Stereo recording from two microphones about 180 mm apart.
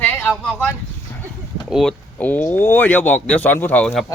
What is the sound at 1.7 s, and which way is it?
Speech, 5° left (ahead or behind).